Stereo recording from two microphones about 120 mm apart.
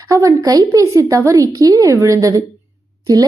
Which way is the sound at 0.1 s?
30° right (ahead or behind).